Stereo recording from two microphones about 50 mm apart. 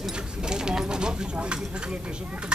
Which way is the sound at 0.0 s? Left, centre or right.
Centre.